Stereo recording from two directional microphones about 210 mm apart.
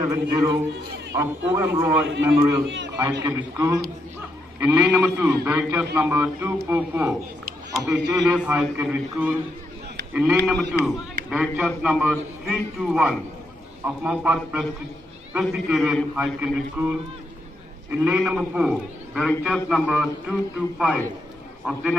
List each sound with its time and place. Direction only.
0.1 s a man's voice: 15° right (ahead or behind)
2.6 s a man's voice: 60° right (ahead or behind)
3.2 s a man's voice: 15° right (ahead or behind)
17.9 s a man's voice: 5° right (ahead or behind)